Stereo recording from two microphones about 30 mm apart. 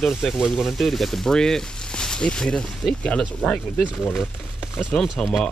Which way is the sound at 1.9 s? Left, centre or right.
Left.